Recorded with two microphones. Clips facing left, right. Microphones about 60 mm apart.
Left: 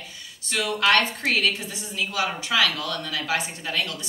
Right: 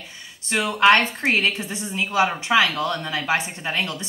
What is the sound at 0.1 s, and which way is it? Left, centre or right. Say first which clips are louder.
A woman's voice: right 5 dB; right.